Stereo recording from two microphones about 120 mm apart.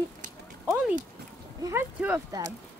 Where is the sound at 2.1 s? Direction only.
30° right (ahead or behind).